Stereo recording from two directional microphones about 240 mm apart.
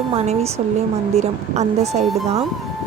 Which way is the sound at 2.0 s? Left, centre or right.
Centre.